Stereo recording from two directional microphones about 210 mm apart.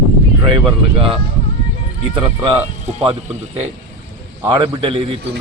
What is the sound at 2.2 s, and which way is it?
Speech, 25° right (ahead or behind).